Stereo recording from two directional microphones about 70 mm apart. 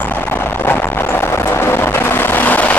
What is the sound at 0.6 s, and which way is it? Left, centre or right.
Music, left.